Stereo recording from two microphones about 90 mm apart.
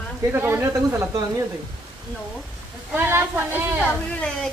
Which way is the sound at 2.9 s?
25° right (ahead or behind).